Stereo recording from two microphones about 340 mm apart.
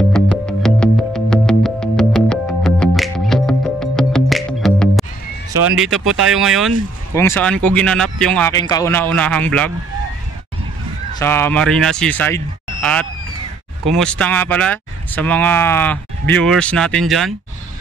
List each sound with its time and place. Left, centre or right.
0.1 s music: centre
5.5 s a sound: right
6.3 s speech: centre
11.1 s speech: centre
13.8 s speech: centre